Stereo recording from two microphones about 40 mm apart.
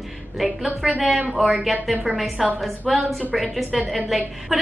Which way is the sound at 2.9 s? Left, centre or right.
Centre.